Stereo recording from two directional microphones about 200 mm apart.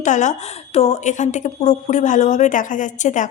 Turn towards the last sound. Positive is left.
turn(degrees=40)  # may be behind; listen again after turning